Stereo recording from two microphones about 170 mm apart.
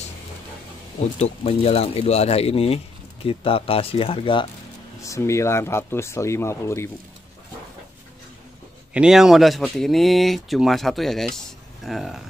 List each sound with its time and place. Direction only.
1.2 s speech: 35° left (ahead or behind)
5.0 s speech: 20° left (ahead or behind)
8.9 s speech: 5° right (ahead or behind)